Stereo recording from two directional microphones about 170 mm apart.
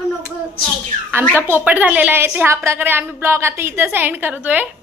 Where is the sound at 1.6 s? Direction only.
10° right (ahead or behind).